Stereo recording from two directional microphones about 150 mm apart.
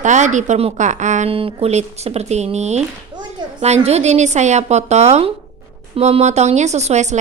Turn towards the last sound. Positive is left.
turn(degrees=-50)  # may be behind; listen again after turning